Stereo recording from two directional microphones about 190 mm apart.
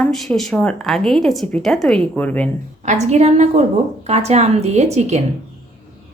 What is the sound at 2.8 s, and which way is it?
A woman's voice, 40° right (ahead or behind).